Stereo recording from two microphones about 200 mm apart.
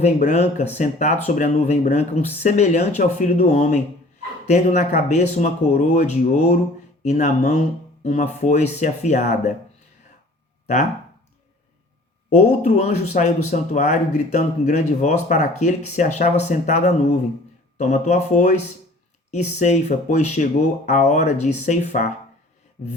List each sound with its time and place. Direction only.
0.0 s speech: 35° left (ahead or behind)
12.3 s speech: 35° left (ahead or behind)